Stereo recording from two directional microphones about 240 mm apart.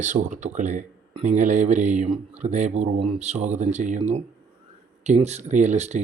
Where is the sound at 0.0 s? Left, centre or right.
Right.